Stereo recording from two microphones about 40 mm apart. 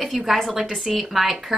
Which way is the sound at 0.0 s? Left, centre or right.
Centre.